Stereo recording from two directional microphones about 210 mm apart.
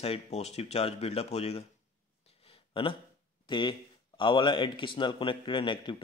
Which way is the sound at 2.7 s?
25° left (ahead or behind).